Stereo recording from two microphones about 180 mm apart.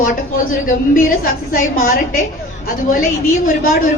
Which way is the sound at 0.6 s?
50° left (ahead or behind).